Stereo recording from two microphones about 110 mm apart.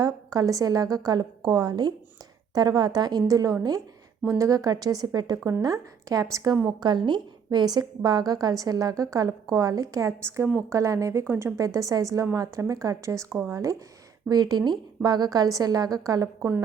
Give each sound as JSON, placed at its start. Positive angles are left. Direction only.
{"t": 0.0, "sound": "a woman's voice", "side_deg": -35}